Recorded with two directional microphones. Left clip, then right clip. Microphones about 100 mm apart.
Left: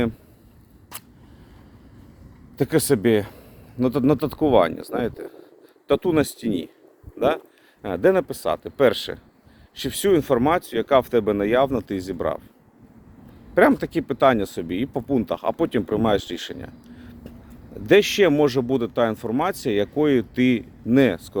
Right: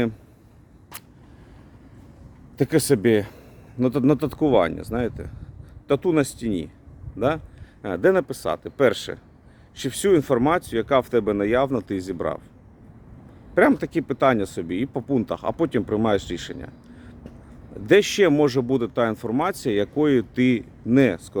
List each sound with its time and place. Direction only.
2.6 s speech: 35° right (ahead or behind); by 6.7 s 15° right (ahead or behind)
7.2 s a sound: 15° right (ahead or behind)
7.9 s speech: 30° right (ahead or behind)
13.5 s speech: 15° right (ahead or behind)